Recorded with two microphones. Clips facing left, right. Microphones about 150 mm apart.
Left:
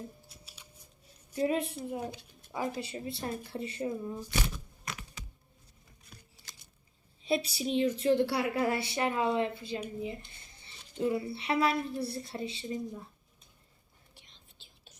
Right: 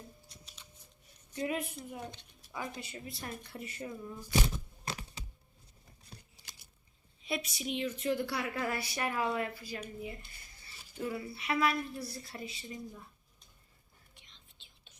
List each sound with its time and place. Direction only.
0.3 s scissors: 5° left (ahead or behind)
1.4 s a woman's voice: 30° left (ahead or behind)
2.0 s speech: 10° left (ahead or behind)
2.5 s a woman's voice: 30° left (ahead or behind)
4.5 s a sound: 30° right (ahead or behind)
7.2 s a woman's voice: 30° left (ahead or behind)
10.0 s a sound: 25° left (ahead or behind)
10.9 s a woman's voice: 25° left (ahead or behind)
14.2 s whispering: 40° left (ahead or behind)